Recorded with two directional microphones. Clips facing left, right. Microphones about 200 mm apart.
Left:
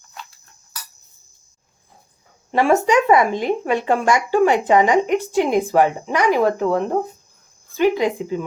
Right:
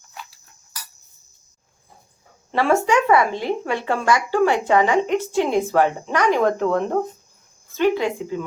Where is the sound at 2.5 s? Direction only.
15° left (ahead or behind).